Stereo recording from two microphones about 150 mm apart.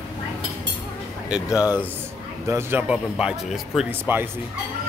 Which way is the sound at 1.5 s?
25° left (ahead or behind).